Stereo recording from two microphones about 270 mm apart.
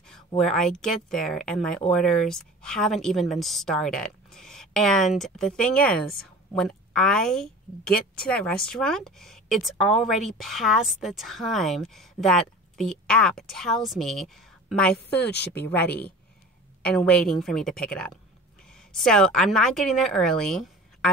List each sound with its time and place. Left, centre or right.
0.4 s a woman's voice: centre
15.3 s speech: left
16.8 s speech: centre